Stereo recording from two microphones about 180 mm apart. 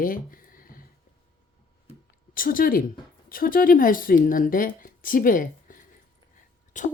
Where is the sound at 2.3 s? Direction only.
50° left (ahead or behind).